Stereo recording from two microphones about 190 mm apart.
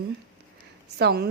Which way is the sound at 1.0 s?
55° right (ahead or behind).